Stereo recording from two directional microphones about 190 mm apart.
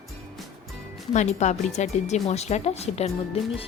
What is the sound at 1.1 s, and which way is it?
Speech, 40° left (ahead or behind).